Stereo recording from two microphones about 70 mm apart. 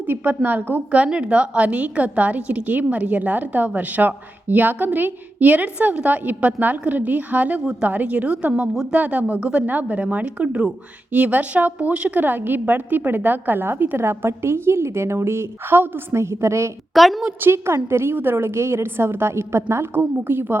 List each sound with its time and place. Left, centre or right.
0.1 s a woman's voice: right
16.9 s a woman's voice: centre
17.5 s a woman's voice: right